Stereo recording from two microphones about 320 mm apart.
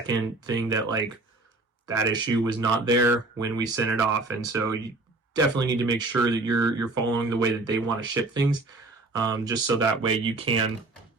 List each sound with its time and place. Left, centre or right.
0.0 s speech: centre
6.5 s speech: right
6.7 s speech: centre